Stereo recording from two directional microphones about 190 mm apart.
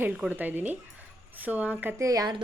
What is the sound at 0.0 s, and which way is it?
Speech, 10° right (ahead or behind).